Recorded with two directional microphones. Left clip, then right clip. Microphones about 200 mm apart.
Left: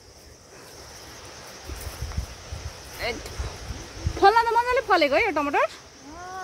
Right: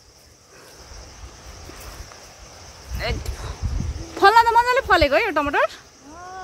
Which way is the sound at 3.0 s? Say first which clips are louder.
Right 2 dB; 5° right (ahead or behind).